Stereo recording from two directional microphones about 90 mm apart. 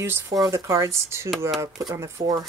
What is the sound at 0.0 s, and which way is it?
Speech, 30° right (ahead or behind).